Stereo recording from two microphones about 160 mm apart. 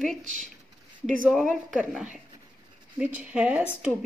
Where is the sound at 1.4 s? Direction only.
5° right (ahead or behind).